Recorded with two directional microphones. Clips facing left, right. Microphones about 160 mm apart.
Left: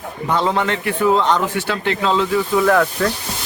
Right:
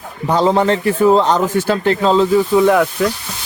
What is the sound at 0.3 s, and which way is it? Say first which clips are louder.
Speech: right 5 dB; 35° right (ahead or behind).